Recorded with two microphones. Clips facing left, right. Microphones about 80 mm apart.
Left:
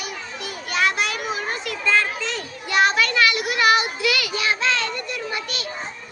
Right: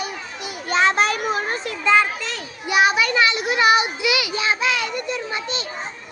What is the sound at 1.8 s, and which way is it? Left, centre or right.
Children playing, centre.